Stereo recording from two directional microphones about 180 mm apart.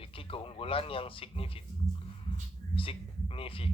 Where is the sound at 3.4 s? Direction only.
30° left (ahead or behind).